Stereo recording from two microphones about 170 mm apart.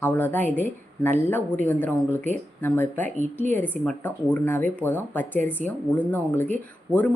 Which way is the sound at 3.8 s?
10° left (ahead or behind).